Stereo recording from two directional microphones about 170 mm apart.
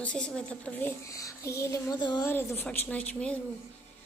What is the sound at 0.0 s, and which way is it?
A woman's voice, 5° left (ahead or behind).